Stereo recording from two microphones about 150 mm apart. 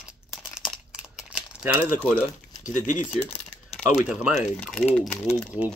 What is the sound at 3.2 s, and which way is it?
Typing, 35° left (ahead or behind).